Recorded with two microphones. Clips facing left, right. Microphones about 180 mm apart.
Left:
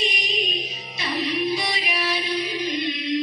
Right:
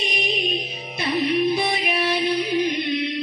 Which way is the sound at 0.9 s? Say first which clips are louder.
Right 5 dB; 55° right (ahead or behind).